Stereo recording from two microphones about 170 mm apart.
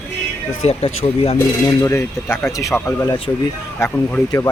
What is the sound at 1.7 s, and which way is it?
Speech, 15° left (ahead or behind).